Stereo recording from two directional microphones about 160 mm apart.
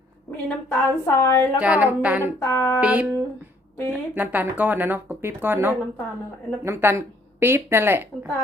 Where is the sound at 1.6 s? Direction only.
10° right (ahead or behind).